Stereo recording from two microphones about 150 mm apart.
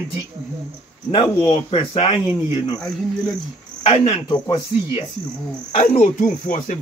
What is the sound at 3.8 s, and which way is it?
A man's voice, 45° left (ahead or behind).